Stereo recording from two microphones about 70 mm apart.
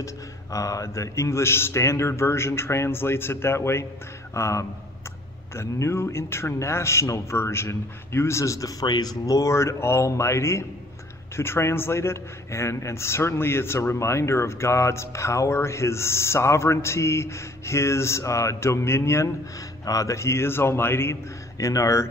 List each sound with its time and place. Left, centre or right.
0.0 s speech: left
9.2 s speech: left
19.8 s speech: left